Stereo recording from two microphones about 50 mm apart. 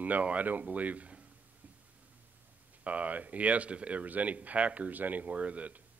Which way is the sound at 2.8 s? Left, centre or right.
Right.